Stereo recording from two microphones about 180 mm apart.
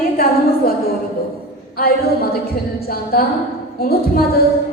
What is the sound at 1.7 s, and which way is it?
A woman's voice, 55° left (ahead or behind).